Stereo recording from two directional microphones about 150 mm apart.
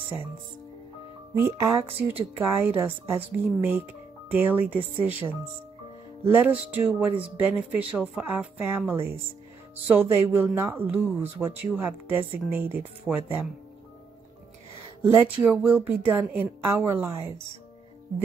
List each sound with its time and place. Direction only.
1.3 s speech: 20° right (ahead or behind)
4.3 s speech: 10° right (ahead or behind)
15.0 s speech: 15° right (ahead or behind)